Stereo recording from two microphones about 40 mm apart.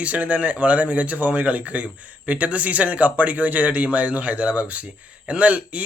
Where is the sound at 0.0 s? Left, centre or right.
Right.